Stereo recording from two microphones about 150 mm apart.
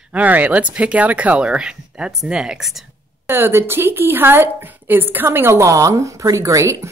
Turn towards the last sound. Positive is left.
turn(degrees=-20)  # may be behind; listen again after turning